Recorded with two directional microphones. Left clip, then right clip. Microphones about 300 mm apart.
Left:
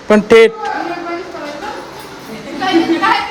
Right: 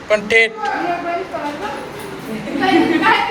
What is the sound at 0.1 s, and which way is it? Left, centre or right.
Speech, left.